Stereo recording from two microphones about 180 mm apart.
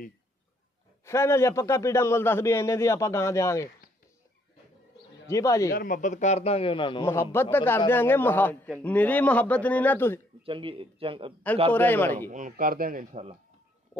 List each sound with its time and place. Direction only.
1.0 s a man's voice: 15° left (ahead or behind)
5.2 s a man's voice: 15° left (ahead or behind)
5.7 s a man's voice: 50° left (ahead or behind); by 7.1 s 25° left (ahead or behind)
7.3 s a man's voice: 10° left (ahead or behind)
10.4 s speech: 30° right (ahead or behind)
11.7 s a man's voice: 10° left (ahead or behind)
12.3 s speech: 45° right (ahead or behind)